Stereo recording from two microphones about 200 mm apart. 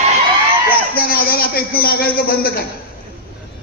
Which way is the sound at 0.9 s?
50° left (ahead or behind).